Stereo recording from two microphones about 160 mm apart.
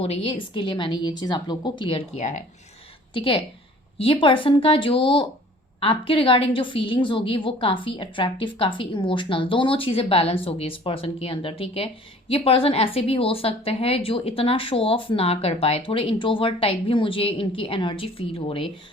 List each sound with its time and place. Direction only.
0.0 s a woman's voice: 35° left (ahead or behind)
3.1 s a woman's voice: 35° left (ahead or behind)